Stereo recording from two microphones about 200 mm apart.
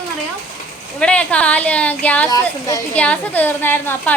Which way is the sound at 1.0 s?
5° left (ahead or behind).